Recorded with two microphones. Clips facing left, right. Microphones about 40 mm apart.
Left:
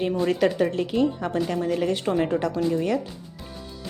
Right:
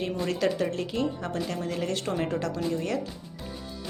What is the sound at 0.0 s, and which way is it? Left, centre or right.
Speech, left.